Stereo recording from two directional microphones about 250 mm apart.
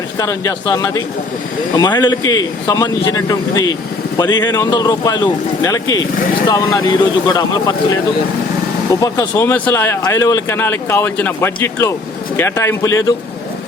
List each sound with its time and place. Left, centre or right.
0.2 s speech: centre
9.0 s speech: centre